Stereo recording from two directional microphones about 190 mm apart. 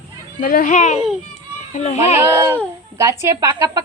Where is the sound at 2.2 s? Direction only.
10° right (ahead or behind).